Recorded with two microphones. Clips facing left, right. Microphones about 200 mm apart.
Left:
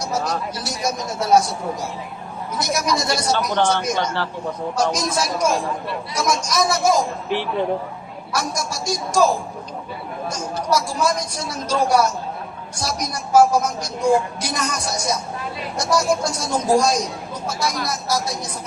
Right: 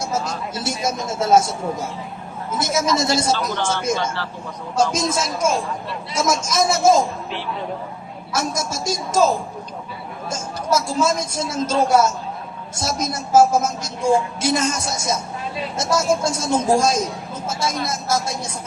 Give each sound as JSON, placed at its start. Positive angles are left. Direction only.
{"t": 0.0, "sound": "speech", "side_deg": -25}
{"t": 3.3, "sound": "speech", "side_deg": 60}
{"t": 4.8, "sound": "speech", "side_deg": -25}
{"t": 8.3, "sound": "speech", "side_deg": -25}